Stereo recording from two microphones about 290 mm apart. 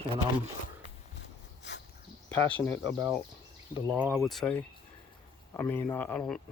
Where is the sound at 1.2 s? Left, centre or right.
Left.